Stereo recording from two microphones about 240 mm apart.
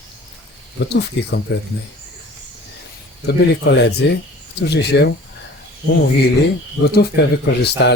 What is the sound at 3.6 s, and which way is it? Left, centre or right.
A man's voice, left.